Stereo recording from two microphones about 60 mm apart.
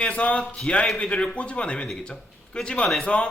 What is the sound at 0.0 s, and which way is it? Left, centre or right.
Speech, centre.